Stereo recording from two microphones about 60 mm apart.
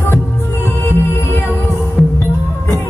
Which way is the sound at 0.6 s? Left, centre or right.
Left.